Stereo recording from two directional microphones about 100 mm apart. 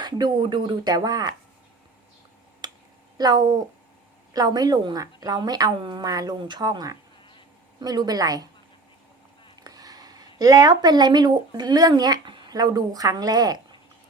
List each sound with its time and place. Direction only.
0.0 s speech: 45° right (ahead or behind)
2.6 s finger snapping: 45° right (ahead or behind)
3.2 s speech: 40° right (ahead or behind)
9.6 s speech: 40° right (ahead or behind)